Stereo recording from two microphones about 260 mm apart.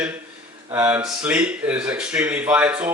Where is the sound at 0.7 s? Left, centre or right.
Centre.